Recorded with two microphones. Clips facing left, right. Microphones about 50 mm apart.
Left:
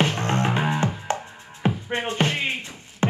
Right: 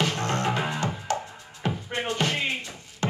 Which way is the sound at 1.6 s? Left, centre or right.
Left.